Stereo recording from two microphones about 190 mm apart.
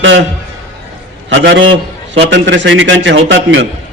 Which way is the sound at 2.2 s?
70° right (ahead or behind).